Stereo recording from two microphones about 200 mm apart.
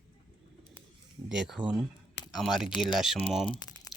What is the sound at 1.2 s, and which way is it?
Speech, 5° right (ahead or behind).